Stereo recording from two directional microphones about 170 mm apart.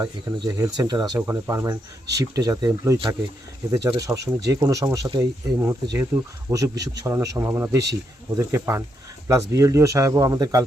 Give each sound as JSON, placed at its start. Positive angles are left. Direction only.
{"t": 0.0, "sound": "speech", "side_deg": -25}